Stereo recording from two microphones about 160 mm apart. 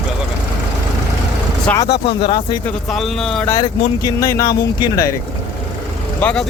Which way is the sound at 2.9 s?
Centre (ahead or behind).